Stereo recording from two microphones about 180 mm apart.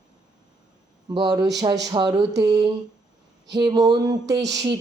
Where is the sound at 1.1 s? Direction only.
25° right (ahead or behind).